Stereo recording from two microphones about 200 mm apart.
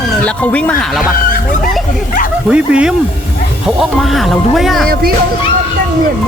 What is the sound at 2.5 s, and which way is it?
Speech, 5° right (ahead or behind).